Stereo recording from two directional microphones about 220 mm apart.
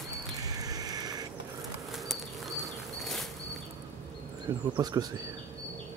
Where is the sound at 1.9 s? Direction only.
Centre (ahead or behind).